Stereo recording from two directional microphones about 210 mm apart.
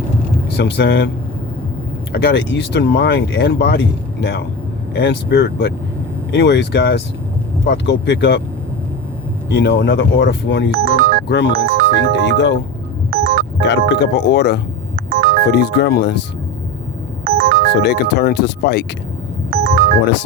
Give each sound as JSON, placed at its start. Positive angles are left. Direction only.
{"t": 0.5, "sound": "speech", "side_deg": 55}
{"t": 2.1, "sound": "speech", "side_deg": 55}
{"t": 9.5, "sound": "speech", "side_deg": 55}
{"t": 10.7, "sound": "ringtone", "side_deg": -45}
{"t": 11.3, "sound": "speech", "side_deg": 55}
{"t": 11.5, "sound": "speech", "side_deg": -45}
{"t": 12.1, "sound": "speech", "side_deg": 55}
{"t": 13.1, "sound": "music", "side_deg": -45}
{"t": 13.6, "sound": "speech", "side_deg": 55}
{"t": 14.9, "sound": "music", "side_deg": -45}
{"t": 15.5, "sound": "speech", "side_deg": 50}
{"t": 17.2, "sound": "ringtone", "side_deg": -45}
{"t": 17.8, "sound": "speech", "side_deg": 50}
{"t": 19.5, "sound": "music", "side_deg": -50}